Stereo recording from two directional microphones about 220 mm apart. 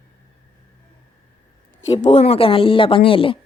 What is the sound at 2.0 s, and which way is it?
Speech, 30° left (ahead or behind).